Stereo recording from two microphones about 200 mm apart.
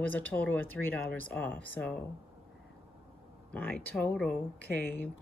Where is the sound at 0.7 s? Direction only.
90° right.